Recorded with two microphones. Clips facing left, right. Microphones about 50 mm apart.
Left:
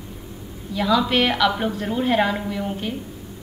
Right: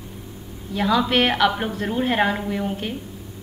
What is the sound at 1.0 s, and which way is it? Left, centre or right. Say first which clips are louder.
Speech: even; right.